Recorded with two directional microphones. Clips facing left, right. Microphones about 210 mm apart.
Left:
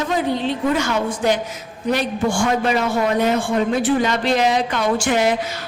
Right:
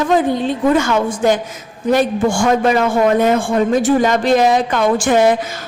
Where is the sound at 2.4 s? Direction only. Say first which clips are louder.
Right 5 dB; 45° right (ahead or behind).